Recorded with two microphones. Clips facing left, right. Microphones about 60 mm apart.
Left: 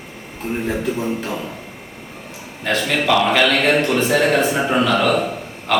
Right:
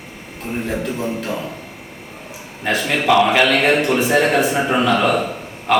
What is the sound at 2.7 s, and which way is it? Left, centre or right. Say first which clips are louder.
Speech: right 1 dB; centre.